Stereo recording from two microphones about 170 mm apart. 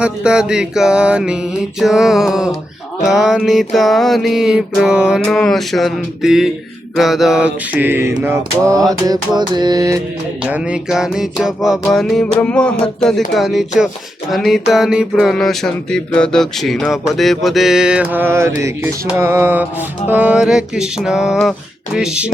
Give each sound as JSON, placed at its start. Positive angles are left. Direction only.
{"t": 0.0, "sound": "music", "side_deg": -5}
{"t": 6.9, "sound": "mantra", "side_deg": 0}
{"t": 10.4, "sound": "music", "side_deg": -5}